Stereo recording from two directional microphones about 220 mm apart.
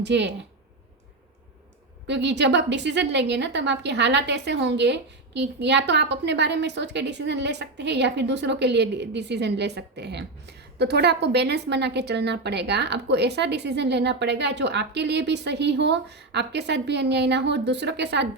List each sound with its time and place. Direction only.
0.0 s a woman's voice: 50° right (ahead or behind)
2.0 s a woman's voice: 50° right (ahead or behind)